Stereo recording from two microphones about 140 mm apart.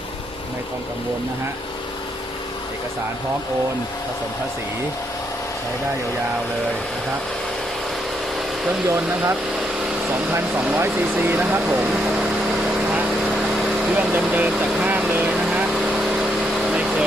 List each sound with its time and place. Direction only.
8.9 s speech: 15° right (ahead or behind)
13.9 s speech: 10° right (ahead or behind)
16.6 s vehicle: 10° right (ahead or behind)